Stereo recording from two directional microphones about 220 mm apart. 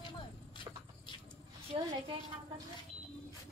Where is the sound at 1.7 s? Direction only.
25° right (ahead or behind).